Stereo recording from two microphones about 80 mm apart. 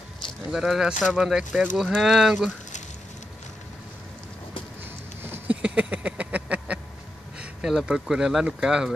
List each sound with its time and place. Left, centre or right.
0.5 s speech: centre
5.2 s a sound: right
7.3 s speech: centre